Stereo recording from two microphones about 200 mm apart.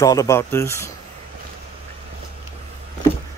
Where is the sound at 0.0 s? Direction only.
15° left (ahead or behind).